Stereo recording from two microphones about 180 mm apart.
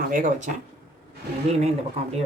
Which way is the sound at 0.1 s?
45° right (ahead or behind).